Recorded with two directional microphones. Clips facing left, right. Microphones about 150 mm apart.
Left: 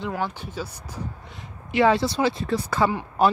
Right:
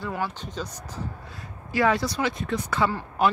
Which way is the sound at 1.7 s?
25° left (ahead or behind).